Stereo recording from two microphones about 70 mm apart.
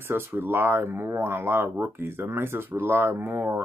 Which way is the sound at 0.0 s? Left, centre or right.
Right.